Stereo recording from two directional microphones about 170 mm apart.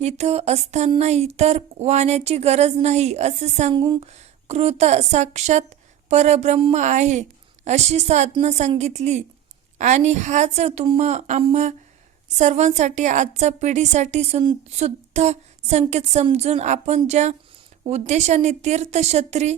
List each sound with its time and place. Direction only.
0.0 s a woman's voice: 40° right (ahead or behind)
3.8 s speech: 25° right (ahead or behind)
4.0 s a woman's voice: 40° right (ahead or behind)